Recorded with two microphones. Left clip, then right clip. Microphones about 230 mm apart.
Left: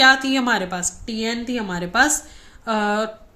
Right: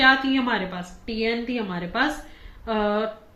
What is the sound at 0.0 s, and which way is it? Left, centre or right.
A woman's voice, left.